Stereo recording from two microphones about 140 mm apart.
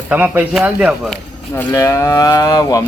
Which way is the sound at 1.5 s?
20° left (ahead or behind).